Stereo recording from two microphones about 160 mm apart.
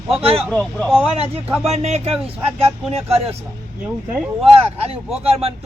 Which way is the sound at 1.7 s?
40° right (ahead or behind).